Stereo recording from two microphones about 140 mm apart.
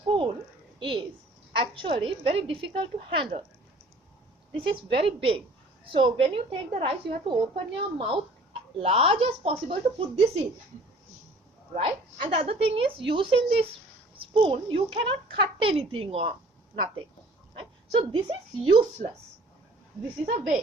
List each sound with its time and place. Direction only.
0.1 s a sound: 35° right (ahead or behind)
1.5 s a woman's voice: 35° right (ahead or behind)
4.5 s a woman's voice: 35° right (ahead or behind)
11.7 s a woman's voice: 40° right (ahead or behind)
17.6 s speech: 40° right (ahead or behind)